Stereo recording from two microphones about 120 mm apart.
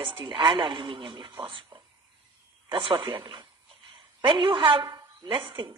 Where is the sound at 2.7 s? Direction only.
45° right (ahead or behind).